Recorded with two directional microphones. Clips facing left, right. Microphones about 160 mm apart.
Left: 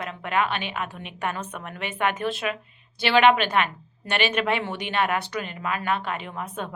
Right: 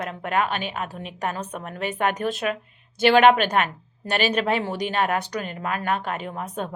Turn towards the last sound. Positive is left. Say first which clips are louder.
# right 3 dB
turn(degrees=-40)  # may be behind; listen again after turning